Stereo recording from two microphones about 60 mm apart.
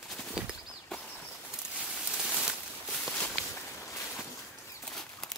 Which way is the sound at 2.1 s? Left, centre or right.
Centre.